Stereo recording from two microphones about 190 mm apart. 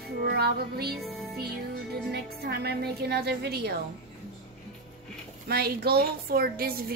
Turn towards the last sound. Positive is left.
turn(degrees=-50)  # may be behind; listen again after turning